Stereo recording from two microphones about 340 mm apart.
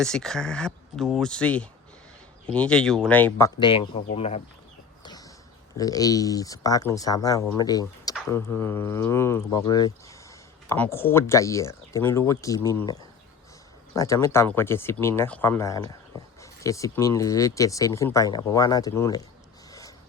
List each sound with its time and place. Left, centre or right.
0.0 s speech: centre
5.7 s speech: centre